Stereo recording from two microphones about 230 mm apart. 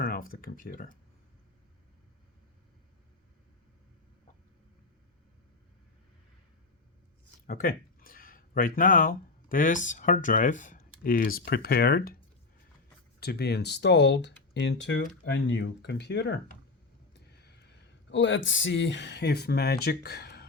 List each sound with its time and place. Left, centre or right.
0.0 s speech: left
7.4 s speech: left
13.1 s speech: left